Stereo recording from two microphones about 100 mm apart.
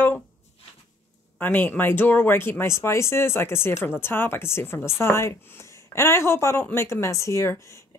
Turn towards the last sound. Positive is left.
turn(degrees=25)  # may be behind; listen again after turning